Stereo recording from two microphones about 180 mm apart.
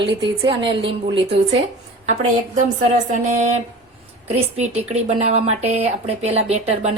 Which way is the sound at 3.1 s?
40° right (ahead or behind).